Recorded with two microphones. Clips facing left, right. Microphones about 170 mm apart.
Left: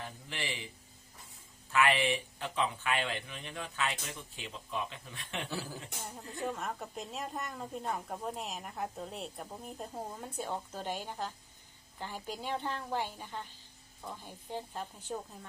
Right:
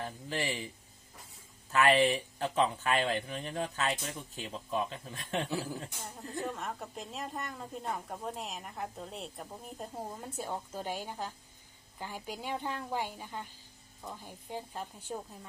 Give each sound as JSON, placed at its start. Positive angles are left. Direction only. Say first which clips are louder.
{"t": 0.0, "sound": "speech", "louder": "right 6 dB", "side_deg": -40}
{"t": 1.7, "sound": "speech", "louder": "right 3 dB", "side_deg": -40}
{"t": 6.0, "sound": "a woman's voice", "louder": "left 3 dB", "side_deg": 0}